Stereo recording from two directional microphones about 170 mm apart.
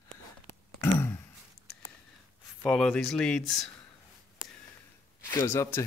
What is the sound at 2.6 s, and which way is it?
Speech, 10° left (ahead or behind).